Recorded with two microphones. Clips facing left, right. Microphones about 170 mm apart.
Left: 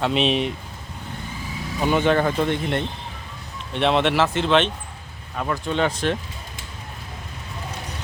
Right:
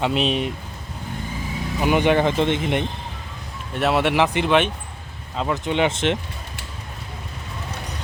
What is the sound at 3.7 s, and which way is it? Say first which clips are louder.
Speech: even; 5° right (ahead or behind).